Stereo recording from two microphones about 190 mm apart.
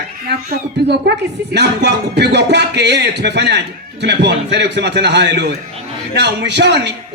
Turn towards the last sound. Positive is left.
turn(degrees=-65)  # may be behind; listen again after turning